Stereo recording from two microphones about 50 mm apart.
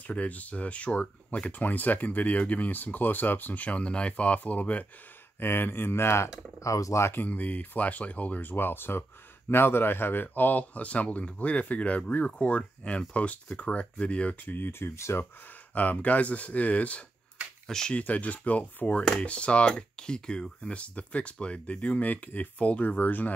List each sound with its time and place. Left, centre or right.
0.0 s speech: left
1.5 s speech: left
5.4 s speech: left
6.6 s speech: left
7.2 s speech: left
14.5 s speech: left
15.7 s speech: left
17.6 s speech: centre
17.9 s speech: left